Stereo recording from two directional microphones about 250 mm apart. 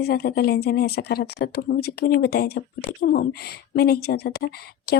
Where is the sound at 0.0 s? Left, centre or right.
Left.